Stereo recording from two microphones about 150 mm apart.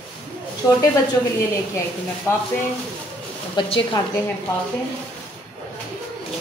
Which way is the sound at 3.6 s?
35° left (ahead or behind).